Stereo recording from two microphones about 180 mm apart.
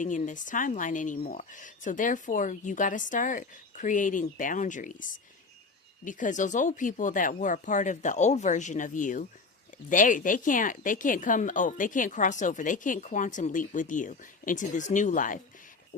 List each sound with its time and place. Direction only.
0.0 s speech: 45° left (ahead or behind)